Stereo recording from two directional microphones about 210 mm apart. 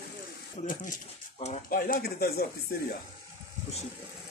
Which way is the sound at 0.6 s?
40° left (ahead or behind).